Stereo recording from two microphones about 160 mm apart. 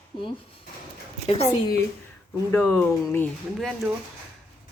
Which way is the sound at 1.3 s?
40° left (ahead or behind).